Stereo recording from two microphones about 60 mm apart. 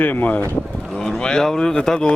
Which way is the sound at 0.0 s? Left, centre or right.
Left.